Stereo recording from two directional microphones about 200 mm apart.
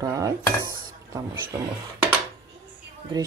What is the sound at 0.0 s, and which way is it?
Speech, 15° right (ahead or behind).